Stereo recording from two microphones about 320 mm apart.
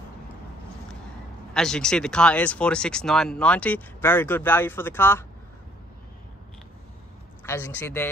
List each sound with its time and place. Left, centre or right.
1.5 s speech: centre
7.4 s a man's voice: centre